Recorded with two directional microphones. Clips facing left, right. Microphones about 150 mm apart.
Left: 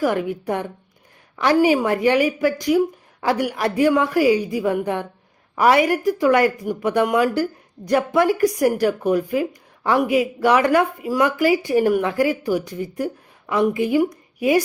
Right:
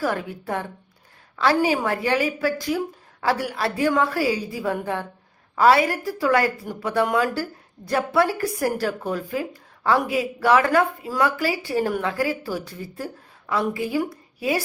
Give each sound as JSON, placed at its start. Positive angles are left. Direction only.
{"t": 0.0, "sound": "a woman's voice", "side_deg": 15}